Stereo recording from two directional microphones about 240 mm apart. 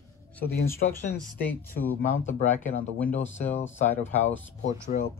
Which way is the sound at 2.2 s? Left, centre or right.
Left.